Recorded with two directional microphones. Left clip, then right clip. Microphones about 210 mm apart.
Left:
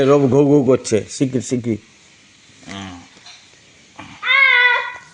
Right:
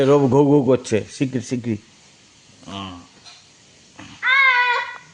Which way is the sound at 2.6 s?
10° right (ahead or behind).